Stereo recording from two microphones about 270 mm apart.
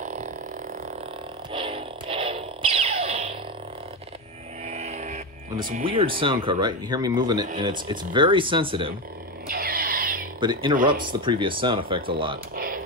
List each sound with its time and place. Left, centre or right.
0.0 s a sound: right
1.5 s music: centre
4.6 s vehicle: right
5.9 s speech: centre
9.5 s a sound: right
10.4 s speech: centre
12.5 s music: right